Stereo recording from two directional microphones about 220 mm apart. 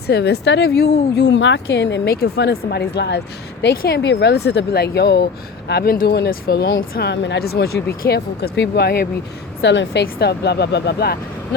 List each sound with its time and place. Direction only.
0.1 s speech: 50° left (ahead or behind)